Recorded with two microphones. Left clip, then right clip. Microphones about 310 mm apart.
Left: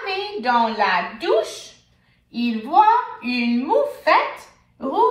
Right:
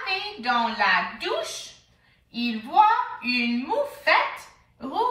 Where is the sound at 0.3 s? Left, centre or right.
Centre.